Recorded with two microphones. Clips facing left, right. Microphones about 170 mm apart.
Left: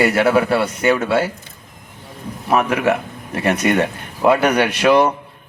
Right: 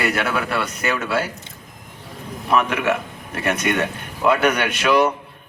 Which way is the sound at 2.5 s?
30° left (ahead or behind).